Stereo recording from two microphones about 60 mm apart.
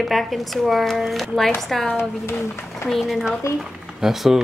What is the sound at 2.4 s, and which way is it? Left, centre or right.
Speech, left.